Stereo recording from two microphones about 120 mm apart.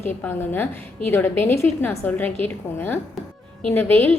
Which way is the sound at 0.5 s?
15° left (ahead or behind).